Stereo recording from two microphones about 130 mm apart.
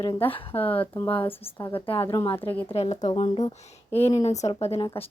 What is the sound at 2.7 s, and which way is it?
Speech, 50° left (ahead or behind).